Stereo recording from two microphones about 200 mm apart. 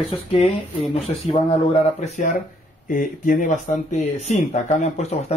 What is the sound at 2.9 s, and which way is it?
Speech, 40° left (ahead or behind).